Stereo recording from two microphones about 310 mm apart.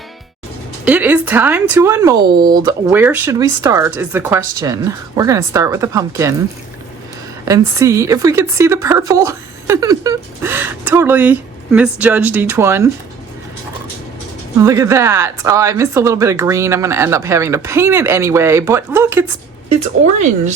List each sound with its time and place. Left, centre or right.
0.9 s a woman's voice: centre
7.4 s a woman's voice: centre
14.6 s a woman's voice: centre
19.7 s speech: right